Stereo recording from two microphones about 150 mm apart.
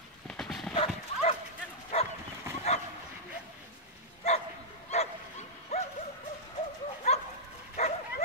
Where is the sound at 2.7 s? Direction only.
45° left (ahead or behind).